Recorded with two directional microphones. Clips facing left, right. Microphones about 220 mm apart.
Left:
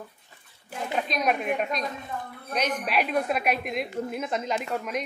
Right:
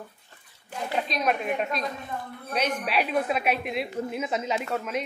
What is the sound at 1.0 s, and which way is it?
A woman's voice, centre (ahead or behind).